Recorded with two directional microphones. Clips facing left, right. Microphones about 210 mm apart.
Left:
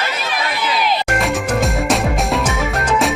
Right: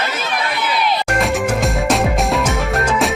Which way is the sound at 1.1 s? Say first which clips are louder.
Right 1 dB; centre (ahead or behind).